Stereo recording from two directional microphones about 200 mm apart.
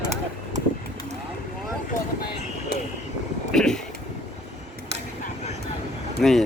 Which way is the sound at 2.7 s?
50° left (ahead or behind).